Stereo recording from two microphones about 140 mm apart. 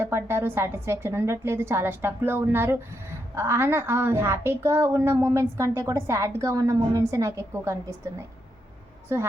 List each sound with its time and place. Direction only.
0.0 s a woman's voice: 15° right (ahead or behind)